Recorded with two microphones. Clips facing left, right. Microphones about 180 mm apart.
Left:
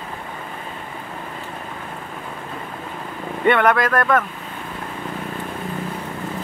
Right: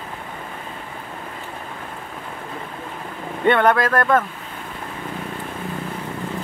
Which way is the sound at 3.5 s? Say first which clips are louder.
Even; 30° right (ahead or behind).